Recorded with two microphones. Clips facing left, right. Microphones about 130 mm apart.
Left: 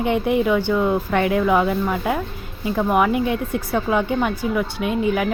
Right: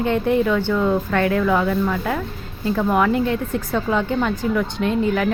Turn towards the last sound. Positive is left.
turn(degrees=10)  # may be behind; listen again after turning